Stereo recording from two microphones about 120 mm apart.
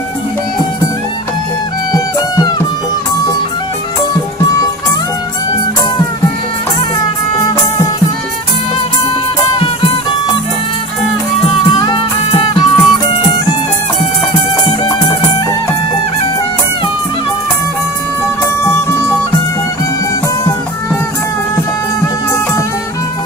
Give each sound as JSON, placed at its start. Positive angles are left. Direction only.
{"t": 2.1, "sound": "music", "side_deg": 30}
{"t": 11.7, "sound": "music", "side_deg": 40}
{"t": 18.6, "sound": "music", "side_deg": 20}